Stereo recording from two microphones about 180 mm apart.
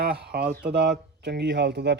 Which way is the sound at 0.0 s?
60° right (ahead or behind).